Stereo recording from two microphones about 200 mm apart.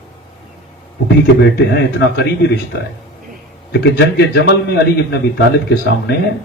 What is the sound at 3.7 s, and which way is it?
A man's voice, 60° left (ahead or behind).